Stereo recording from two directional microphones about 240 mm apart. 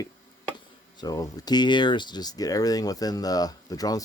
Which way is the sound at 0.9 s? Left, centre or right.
Centre.